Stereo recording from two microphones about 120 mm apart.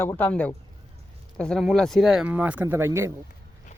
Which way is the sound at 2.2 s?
15° right (ahead or behind).